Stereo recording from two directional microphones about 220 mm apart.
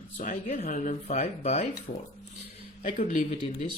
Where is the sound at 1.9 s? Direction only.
45° left (ahead or behind).